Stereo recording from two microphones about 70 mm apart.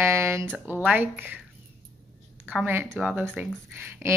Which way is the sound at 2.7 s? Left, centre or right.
Right.